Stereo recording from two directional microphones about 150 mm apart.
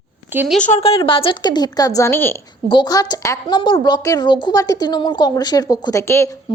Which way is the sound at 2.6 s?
30° left (ahead or behind).